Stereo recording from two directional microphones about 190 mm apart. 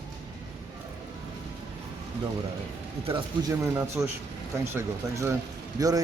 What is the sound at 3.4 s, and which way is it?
Speech, 15° right (ahead or behind).